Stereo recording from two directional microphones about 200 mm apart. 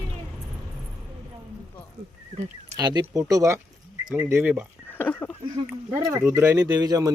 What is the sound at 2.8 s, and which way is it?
Speech, 20° right (ahead or behind).